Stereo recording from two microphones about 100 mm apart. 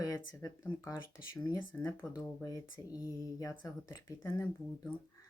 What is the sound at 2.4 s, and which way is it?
Speech, 35° left (ahead or behind).